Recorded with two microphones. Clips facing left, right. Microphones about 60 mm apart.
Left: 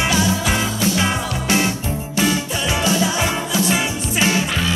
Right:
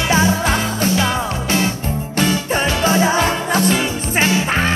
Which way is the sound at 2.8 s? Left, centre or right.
Right.